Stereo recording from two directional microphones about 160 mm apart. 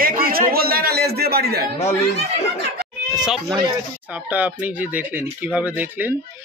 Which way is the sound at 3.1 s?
5° right (ahead or behind).